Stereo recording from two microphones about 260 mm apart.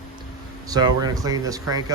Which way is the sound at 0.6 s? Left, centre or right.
Centre.